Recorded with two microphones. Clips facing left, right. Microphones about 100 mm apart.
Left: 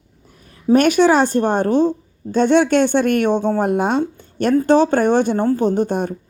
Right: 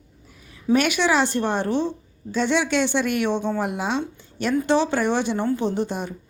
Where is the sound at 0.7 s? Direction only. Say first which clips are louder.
Left 7 dB; 45° left (ahead or behind).